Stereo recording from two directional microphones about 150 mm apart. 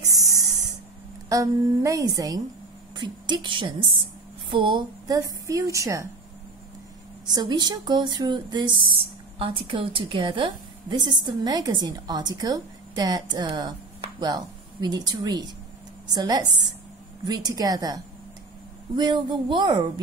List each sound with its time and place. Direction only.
0.0 s spray: 25° right (ahead or behind)
1.3 s a woman's voice: 20° right (ahead or behind)
7.3 s speech: 30° right (ahead or behind)